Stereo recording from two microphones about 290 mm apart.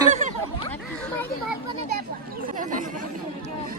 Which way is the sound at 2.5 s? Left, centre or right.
Right.